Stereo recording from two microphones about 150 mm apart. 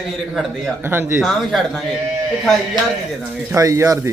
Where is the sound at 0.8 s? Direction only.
15° right (ahead or behind).